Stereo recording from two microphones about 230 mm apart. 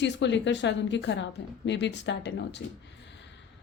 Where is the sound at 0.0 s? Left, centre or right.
Left.